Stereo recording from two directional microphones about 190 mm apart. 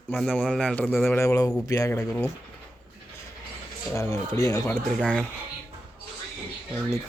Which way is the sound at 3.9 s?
15° left (ahead or behind).